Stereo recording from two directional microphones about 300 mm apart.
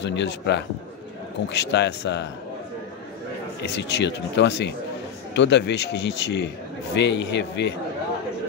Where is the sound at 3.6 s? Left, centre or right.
Left.